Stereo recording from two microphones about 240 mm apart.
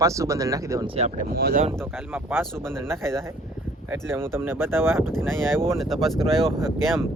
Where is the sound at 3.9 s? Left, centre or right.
Centre.